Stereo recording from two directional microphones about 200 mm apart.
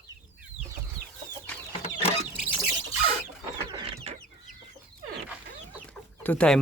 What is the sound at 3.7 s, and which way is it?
Chicken, 25° right (ahead or behind).